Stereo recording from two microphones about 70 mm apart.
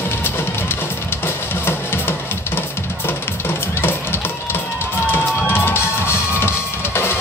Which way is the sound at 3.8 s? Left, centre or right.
Left.